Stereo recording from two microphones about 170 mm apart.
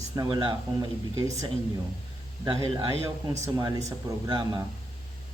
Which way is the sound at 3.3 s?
20° right (ahead or behind).